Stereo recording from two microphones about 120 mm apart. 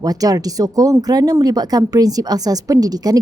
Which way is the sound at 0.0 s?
30° right (ahead or behind).